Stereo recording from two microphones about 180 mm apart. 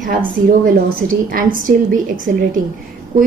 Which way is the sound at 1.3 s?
50° right (ahead or behind).